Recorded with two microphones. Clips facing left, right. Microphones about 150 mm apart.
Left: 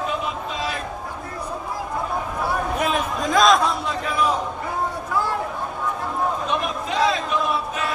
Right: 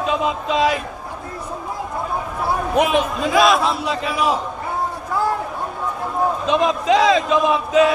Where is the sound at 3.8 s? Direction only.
90° right.